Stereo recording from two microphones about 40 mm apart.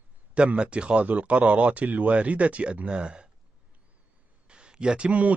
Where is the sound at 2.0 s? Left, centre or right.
Right.